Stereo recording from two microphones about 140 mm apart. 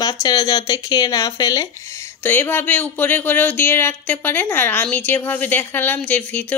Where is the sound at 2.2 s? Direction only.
15° left (ahead or behind).